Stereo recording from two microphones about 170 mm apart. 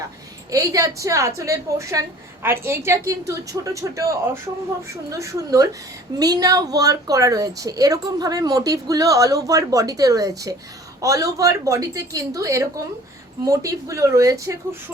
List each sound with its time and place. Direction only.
0.5 s a woman's voice: 20° right (ahead or behind)